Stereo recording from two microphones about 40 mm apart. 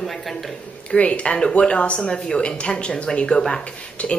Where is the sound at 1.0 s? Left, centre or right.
Left.